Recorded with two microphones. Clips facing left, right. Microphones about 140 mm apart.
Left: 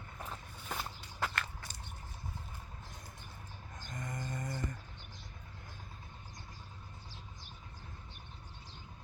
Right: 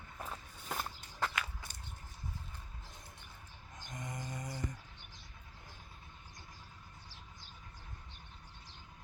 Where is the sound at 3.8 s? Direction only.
20° right (ahead or behind).